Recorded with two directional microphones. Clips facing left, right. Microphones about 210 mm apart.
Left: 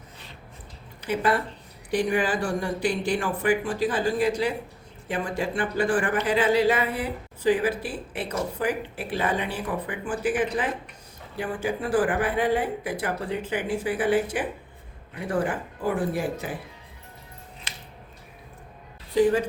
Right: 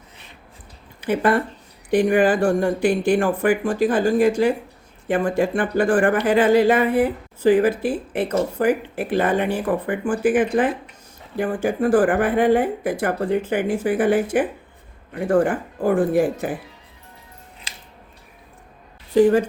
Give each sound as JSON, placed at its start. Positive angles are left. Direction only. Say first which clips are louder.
{"t": 1.0, "sound": "a woman's voice", "louder": "right 5 dB", "side_deg": -50}
{"t": 19.1, "sound": "a woman's voice", "louder": "right 6 dB", "side_deg": -50}